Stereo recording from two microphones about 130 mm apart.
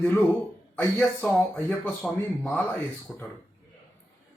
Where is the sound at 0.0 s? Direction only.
20° left (ahead or behind).